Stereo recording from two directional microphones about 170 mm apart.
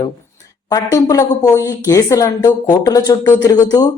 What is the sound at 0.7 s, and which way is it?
A woman's voice, 20° left (ahead or behind).